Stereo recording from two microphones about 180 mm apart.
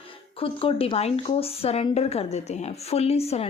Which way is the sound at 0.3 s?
30° left (ahead or behind).